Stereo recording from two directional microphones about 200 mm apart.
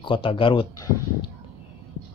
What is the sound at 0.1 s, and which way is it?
Speech, 25° left (ahead or behind).